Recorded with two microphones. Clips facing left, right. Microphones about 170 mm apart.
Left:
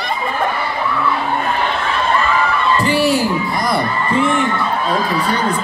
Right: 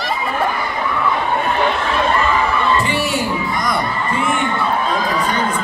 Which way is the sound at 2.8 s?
35° left (ahead or behind).